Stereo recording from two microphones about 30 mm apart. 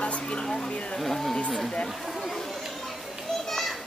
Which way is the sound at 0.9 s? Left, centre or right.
Centre.